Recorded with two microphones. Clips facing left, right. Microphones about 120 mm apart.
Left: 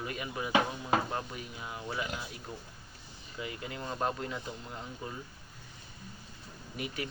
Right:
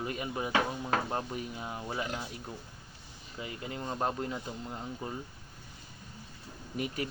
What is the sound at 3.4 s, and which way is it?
Speech, 30° right (ahead or behind).